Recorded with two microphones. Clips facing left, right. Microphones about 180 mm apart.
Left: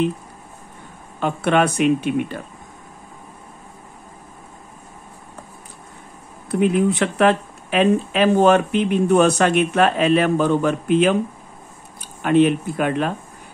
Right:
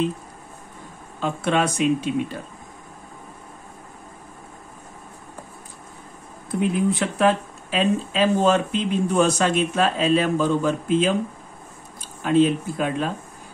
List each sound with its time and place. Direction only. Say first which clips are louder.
1.2 s speech: left 4 dB; 60° left (ahead or behind)
6.5 s speech: left 4 dB; 70° left (ahead or behind)
12.2 s speech: left 3 dB; 65° left (ahead or behind)